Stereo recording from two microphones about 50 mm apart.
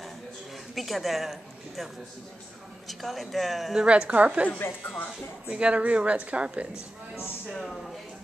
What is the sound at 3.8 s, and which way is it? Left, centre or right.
Speech, right.